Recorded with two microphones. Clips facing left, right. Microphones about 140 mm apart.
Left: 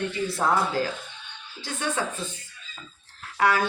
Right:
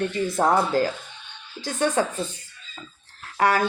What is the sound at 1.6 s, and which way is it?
Speech, 45° right (ahead or behind).